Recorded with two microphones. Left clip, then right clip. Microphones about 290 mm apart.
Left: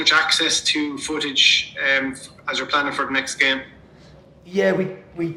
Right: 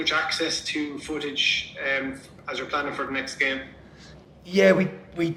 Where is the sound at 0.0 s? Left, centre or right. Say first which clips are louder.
Left 8 dB; left.